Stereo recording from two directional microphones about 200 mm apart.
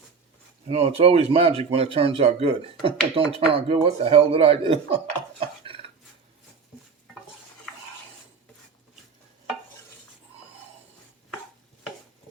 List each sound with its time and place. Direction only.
0.7 s speech: 30° right (ahead or behind)